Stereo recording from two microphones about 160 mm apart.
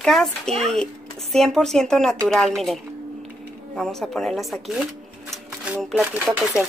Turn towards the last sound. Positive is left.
turn(degrees=-10)  # may be behind; listen again after turning